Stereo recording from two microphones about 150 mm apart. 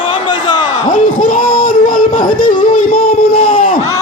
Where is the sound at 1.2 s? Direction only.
65° left (ahead or behind).